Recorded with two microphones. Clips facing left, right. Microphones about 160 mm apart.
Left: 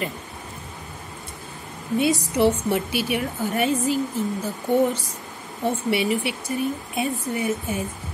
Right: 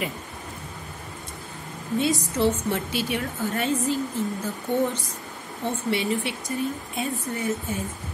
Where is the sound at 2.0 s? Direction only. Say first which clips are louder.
Left 3 dB; 65° left (ahead or behind).